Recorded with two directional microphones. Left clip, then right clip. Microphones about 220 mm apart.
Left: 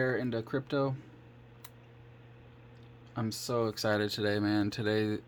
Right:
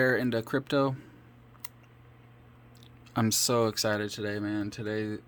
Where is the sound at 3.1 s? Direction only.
25° right (ahead or behind).